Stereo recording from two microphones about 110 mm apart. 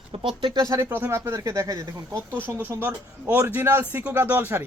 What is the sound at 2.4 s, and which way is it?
Speech, 20° right (ahead or behind).